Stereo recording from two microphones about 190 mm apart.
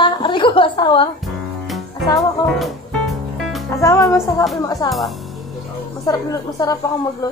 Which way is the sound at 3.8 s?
15° left (ahead or behind).